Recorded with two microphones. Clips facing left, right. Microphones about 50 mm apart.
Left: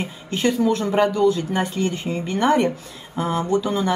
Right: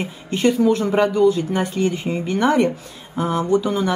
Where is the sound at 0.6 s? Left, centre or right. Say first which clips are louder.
Right 3 dB; centre.